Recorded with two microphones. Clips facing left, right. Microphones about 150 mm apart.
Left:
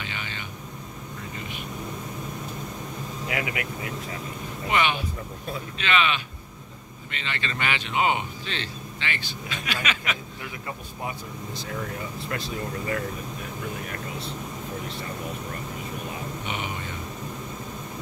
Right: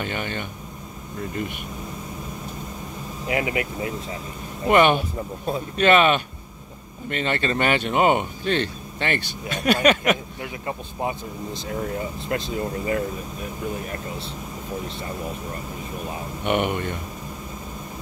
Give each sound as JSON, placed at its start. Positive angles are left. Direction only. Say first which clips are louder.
{"t": 0.0, "sound": "speech", "louder": "right 8 dB", "side_deg": -50}
{"t": 3.3, "sound": "speech", "louder": "right 6 dB", "side_deg": -30}
{"t": 4.6, "sound": "speech", "louder": "right 8 dB", "side_deg": -50}
{"t": 11.0, "sound": "speech", "louder": "right 7 dB", "side_deg": -25}
{"t": 16.4, "sound": "speech", "louder": "right 14 dB", "side_deg": -60}